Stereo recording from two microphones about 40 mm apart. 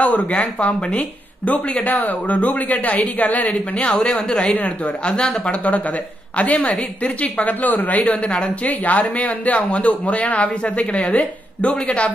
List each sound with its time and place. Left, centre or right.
0.0 s speech: left
1.9 s speech: left
4.0 s speech: left
4.6 s speech: left
5.0 s speech: left
5.6 s speech: left
8.0 s speech: left